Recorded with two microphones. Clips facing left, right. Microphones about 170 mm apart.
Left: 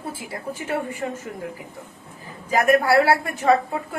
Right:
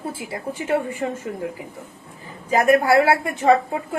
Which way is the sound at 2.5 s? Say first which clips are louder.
Right 2 dB; 30° right (ahead or behind).